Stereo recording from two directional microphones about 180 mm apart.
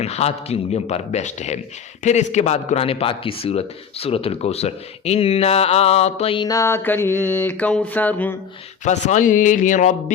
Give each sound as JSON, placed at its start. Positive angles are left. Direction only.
{"t": 0.0, "sound": "speech", "side_deg": 35}
{"t": 8.8, "sound": "speech", "side_deg": 40}